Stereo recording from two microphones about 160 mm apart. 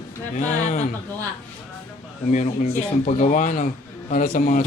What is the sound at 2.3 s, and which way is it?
Speech, 50° left (ahead or behind).